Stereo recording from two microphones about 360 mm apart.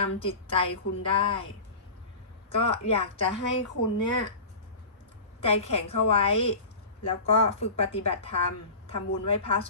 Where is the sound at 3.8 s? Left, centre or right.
Left.